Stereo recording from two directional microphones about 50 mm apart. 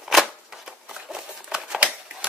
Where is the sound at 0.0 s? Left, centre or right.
Centre.